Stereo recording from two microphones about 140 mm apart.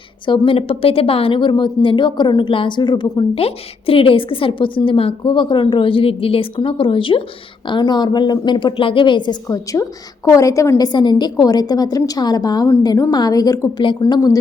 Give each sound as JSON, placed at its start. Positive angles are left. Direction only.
{"t": 0.3, "sound": "a woman's voice", "side_deg": 40}